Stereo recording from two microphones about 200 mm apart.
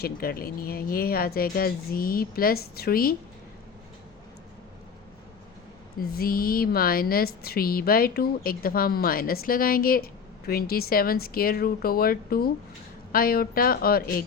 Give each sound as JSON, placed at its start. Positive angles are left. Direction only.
{"t": 0.0, "sound": "a woman's voice", "side_deg": 50}
{"t": 6.0, "sound": "a woman's voice", "side_deg": 50}